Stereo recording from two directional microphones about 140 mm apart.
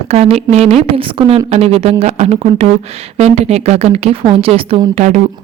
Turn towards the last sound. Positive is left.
turn(degrees=-60)  # may be behind; listen again after turning